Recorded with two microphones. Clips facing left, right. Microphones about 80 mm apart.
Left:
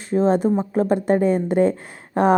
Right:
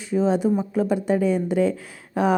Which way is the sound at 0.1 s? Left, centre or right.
Left.